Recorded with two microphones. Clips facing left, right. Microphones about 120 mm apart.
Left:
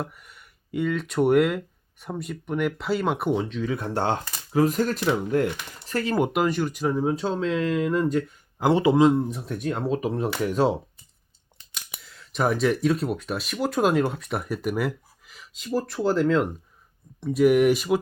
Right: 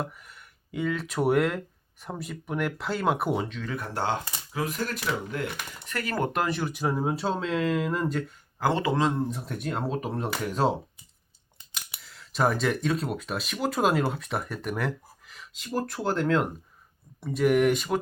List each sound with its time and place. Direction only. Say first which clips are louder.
0.0 s speech: left 1 dB; centre (ahead or behind)
3.8 s speech: left 1 dB; 25° left (ahead or behind); by 5.5 s 45° left (ahead or behind)
5.8 s speech: left 7 dB; 30° left (ahead or behind)
6.1 s speech: left 4 dB; 10° left (ahead or behind)
6.4 s speech: left 4 dB; 5° right (ahead or behind)
8.5 s speech: left 6 dB; 15° left (ahead or behind)
9.1 s speech: left 4 dB; centre (ahead or behind)